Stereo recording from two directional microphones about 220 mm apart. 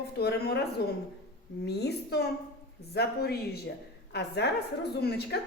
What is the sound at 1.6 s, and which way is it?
A woman's voice, 50° left (ahead or behind).